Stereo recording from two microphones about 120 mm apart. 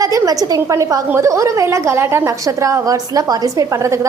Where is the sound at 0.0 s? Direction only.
30° right (ahead or behind).